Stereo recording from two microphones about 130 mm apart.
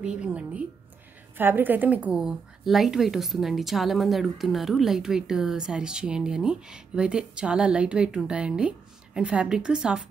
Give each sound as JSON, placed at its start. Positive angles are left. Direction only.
{"t": 0.0, "sound": "a woman's voice", "side_deg": -10}